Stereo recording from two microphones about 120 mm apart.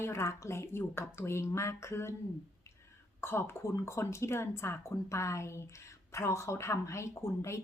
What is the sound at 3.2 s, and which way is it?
A woman's voice, 20° left (ahead or behind).